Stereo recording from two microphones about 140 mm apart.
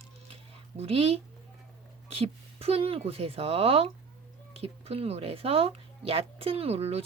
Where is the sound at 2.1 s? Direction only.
45° right (ahead or behind).